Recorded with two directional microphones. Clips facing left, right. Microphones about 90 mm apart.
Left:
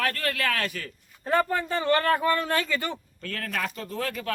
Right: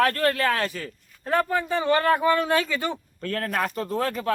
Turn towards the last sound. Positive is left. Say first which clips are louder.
# right 6 dB
turn(degrees=-35)  # may be behind; listen again after turning